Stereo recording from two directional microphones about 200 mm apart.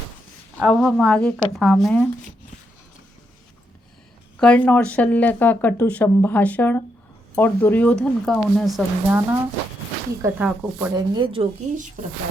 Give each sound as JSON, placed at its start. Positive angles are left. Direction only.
{"t": 0.6, "sound": "speech", "side_deg": 0}
{"t": 4.4, "sound": "speech", "side_deg": 5}
{"t": 10.2, "sound": "speech", "side_deg": -5}
{"t": 10.9, "sound": "speech", "side_deg": -25}